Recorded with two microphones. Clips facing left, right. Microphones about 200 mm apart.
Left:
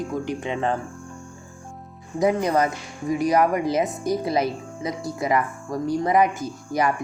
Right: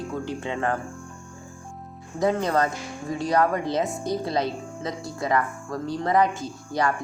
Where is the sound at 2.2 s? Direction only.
15° left (ahead or behind).